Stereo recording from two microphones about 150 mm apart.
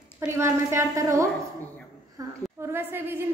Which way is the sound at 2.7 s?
15° right (ahead or behind).